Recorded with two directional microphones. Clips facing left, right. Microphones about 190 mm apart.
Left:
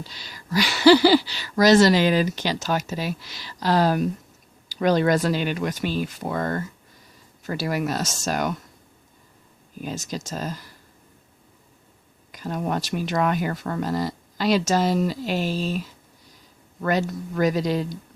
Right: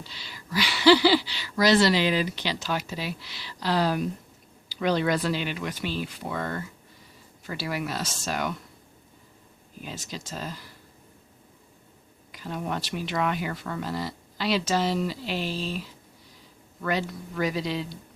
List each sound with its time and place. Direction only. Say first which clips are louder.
0.0 s speech: left 3 dB; 45° left (ahead or behind)
9.8 s speech: left 7 dB; 45° left (ahead or behind)
12.3 s speech: left 5 dB; 45° left (ahead or behind)